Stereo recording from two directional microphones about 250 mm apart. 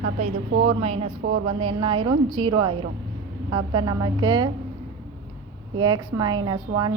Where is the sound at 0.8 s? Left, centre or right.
Right.